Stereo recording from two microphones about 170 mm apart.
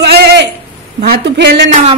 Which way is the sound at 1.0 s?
75° right (ahead or behind).